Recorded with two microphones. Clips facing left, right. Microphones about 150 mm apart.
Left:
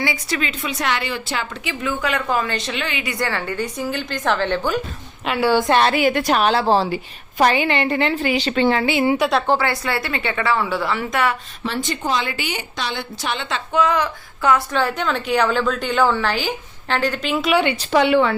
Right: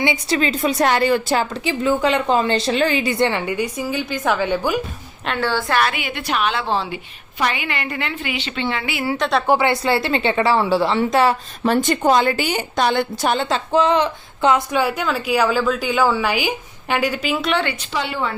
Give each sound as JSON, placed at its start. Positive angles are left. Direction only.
{"t": 0.0, "sound": "a woman's voice", "side_deg": -25}
{"t": 0.3, "sound": "a woman's voice", "side_deg": -35}
{"t": 5.2, "sound": "a woman's voice", "side_deg": 10}
{"t": 5.9, "sound": "a woman's voice", "side_deg": 40}
{"t": 8.9, "sound": "a woman's voice", "side_deg": 25}
{"t": 9.1, "sound": "a woman's voice", "side_deg": 5}
{"t": 9.5, "sound": "a woman's voice", "side_deg": -20}
{"t": 11.6, "sound": "a woman's voice", "side_deg": -50}
{"t": 17.9, "sound": "a woman's voice", "side_deg": 70}